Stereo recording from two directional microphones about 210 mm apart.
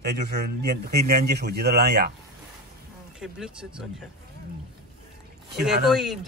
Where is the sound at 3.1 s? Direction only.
Centre (ahead or behind).